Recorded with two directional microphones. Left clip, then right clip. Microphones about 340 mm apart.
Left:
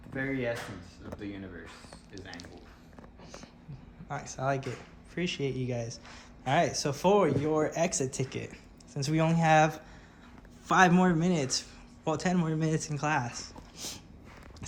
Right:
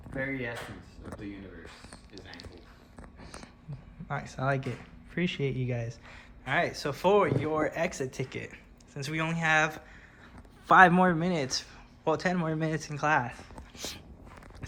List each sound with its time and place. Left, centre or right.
2.1 s speech: centre
4.1 s a man's voice: centre
13.7 s a sound: centre